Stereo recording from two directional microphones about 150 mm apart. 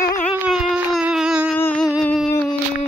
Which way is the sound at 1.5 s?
15° left (ahead or behind).